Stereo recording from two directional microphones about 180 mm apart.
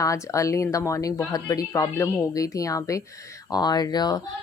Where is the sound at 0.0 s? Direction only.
15° left (ahead or behind).